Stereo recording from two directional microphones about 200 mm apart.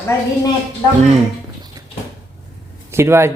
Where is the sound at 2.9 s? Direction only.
15° right (ahead or behind).